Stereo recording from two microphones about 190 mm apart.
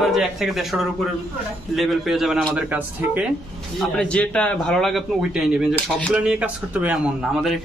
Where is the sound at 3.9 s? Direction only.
5° left (ahead or behind).